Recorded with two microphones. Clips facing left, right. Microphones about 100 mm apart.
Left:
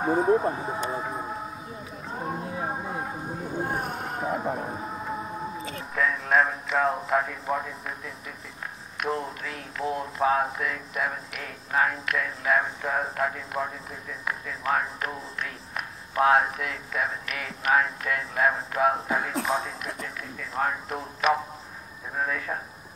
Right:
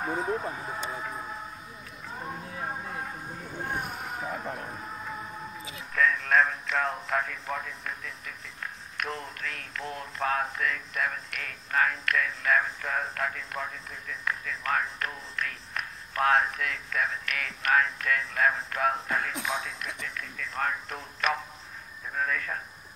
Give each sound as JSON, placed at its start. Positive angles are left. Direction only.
{"t": 0.2, "sound": "speech", "side_deg": 25}
{"t": 1.1, "sound": "train", "side_deg": 30}
{"t": 2.0, "sound": "a sound", "side_deg": 25}
{"t": 3.6, "sound": "vehicle", "side_deg": 35}
{"t": 3.9, "sound": "boat", "side_deg": 0}
{"t": 4.8, "sound": "music", "side_deg": 25}
{"t": 5.9, "sound": "speech", "side_deg": 5}
{"t": 8.9, "sound": "speech", "side_deg": 5}
{"t": 19.3, "sound": "speech", "side_deg": 35}
{"t": 19.8, "sound": "speech", "side_deg": 5}